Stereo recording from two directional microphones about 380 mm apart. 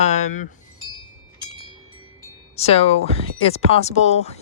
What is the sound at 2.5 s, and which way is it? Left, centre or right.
Speech, centre.